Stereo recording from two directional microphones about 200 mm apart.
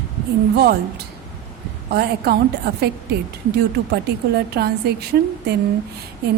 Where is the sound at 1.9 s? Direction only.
50° right (ahead or behind).